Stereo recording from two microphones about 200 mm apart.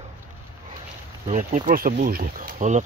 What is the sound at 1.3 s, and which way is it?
Speech, 40° right (ahead or behind).